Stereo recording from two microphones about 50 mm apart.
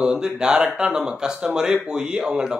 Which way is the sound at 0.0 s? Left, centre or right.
Centre.